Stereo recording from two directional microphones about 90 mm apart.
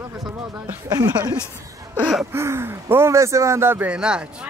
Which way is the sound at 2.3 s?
30° right (ahead or behind).